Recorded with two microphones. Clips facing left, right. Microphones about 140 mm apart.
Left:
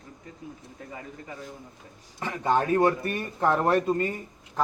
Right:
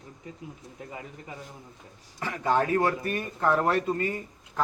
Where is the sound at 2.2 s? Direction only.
25° left (ahead or behind).